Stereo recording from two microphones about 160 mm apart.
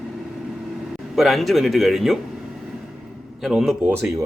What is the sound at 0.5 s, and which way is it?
Air conditioning, centre (ahead or behind).